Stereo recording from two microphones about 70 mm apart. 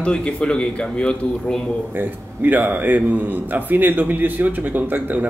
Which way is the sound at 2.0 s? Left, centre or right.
Right.